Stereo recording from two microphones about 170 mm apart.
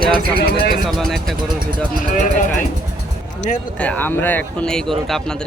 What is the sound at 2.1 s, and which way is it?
Speech, 50° left (ahead or behind).